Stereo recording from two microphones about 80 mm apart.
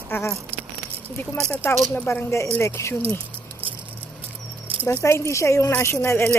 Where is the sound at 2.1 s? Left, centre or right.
Left.